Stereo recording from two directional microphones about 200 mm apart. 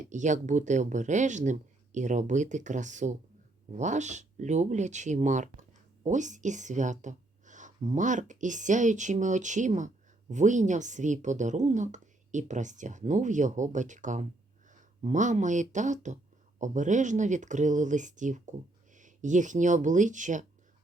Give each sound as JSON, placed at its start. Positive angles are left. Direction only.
{"t": 0.0, "sound": "speech", "side_deg": -35}